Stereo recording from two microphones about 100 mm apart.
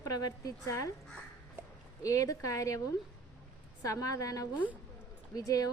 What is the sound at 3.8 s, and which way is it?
A woman's voice, 35° left (ahead or behind).